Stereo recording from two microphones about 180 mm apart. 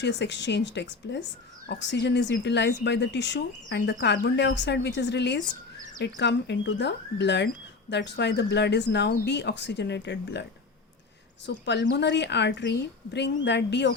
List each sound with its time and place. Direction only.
0.0 s speech: 75° left (ahead or behind)
11.4 s speech: 75° left (ahead or behind)